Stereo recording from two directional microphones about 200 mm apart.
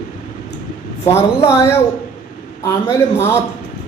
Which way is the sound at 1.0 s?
15° left (ahead or behind).